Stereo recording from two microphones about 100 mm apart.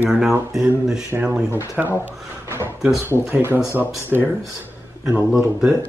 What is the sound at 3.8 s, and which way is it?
Speech, 20° right (ahead or behind).